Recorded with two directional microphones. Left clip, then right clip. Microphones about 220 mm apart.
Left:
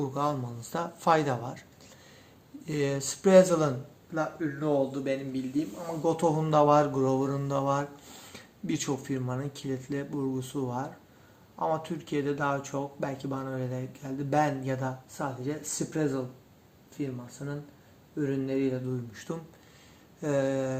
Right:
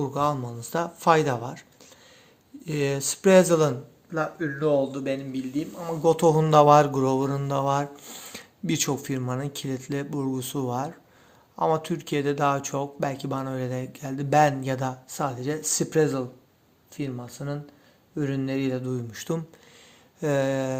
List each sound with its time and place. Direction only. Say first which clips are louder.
0.0 s speech: right 5 dB; 25° right (ahead or behind)
2.6 s speech: right 4 dB; 25° right (ahead or behind)